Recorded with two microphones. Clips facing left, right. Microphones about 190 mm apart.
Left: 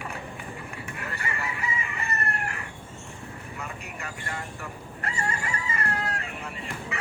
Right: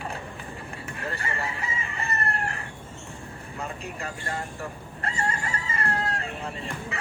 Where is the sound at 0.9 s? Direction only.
30° right (ahead or behind).